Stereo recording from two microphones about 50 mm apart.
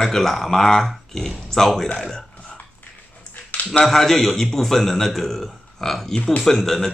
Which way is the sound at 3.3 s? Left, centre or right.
Left.